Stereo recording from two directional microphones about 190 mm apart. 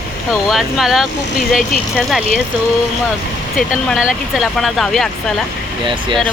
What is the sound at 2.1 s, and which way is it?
Speech, centre (ahead or behind).